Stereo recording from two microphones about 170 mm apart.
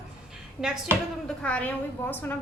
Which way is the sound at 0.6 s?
5° right (ahead or behind).